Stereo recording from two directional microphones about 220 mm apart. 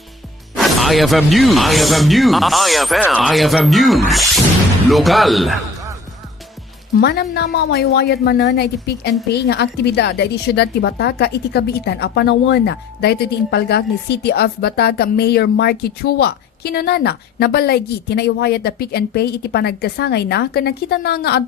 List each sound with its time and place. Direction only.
0.5 s speech: centre (ahead or behind)
7.0 s a woman's voice: 45° left (ahead or behind)